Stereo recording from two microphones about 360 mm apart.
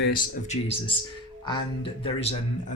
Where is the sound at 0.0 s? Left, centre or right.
Left.